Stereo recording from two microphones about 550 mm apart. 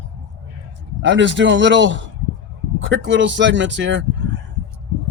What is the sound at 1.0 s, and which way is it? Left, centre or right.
Speech, centre.